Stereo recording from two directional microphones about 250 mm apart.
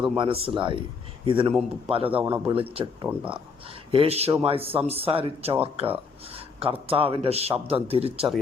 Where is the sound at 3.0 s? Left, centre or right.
Centre.